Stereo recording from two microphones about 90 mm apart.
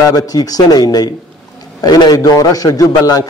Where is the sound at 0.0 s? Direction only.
40° left (ahead or behind).